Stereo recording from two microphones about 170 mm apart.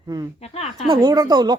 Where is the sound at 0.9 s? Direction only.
25° right (ahead or behind).